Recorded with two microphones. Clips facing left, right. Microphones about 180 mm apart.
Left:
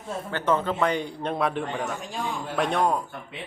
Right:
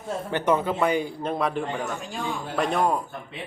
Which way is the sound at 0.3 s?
15° right (ahead or behind).